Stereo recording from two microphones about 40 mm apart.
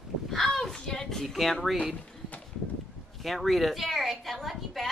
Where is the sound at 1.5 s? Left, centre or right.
Centre.